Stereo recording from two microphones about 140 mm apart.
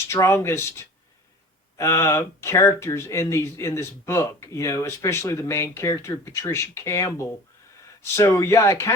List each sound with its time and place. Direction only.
0.1 s speech: 20° left (ahead or behind)